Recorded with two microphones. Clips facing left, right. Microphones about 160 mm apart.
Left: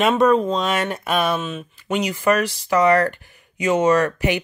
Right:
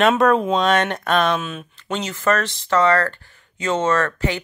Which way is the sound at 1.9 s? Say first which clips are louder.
Left 2 dB; 10° left (ahead or behind).